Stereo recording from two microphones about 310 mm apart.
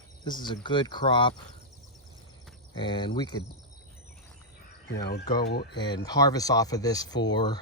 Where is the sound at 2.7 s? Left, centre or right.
Centre.